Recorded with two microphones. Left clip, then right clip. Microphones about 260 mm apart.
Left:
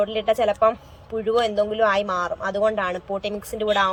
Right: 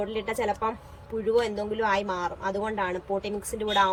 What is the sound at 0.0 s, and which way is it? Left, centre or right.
Speech, centre.